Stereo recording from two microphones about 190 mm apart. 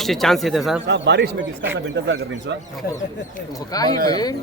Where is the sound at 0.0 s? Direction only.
Centre (ahead or behind).